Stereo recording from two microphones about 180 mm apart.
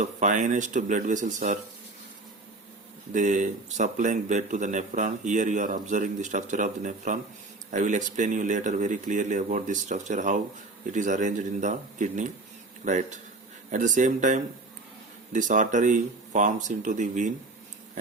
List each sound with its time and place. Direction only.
0.0 s speech: 45° right (ahead or behind)
3.1 s speech: 45° right (ahead or behind)